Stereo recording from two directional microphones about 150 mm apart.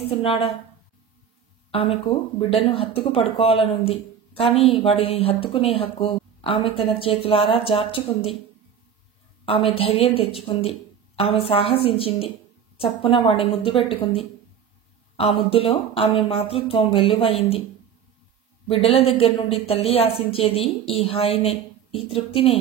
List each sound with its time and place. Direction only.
0.0 s a woman's voice: 40° left (ahead or behind)
1.7 s a woman's voice: 40° left (ahead or behind)
9.8 s a woman's voice: 40° left (ahead or behind)
18.7 s a woman's voice: 40° left (ahead or behind)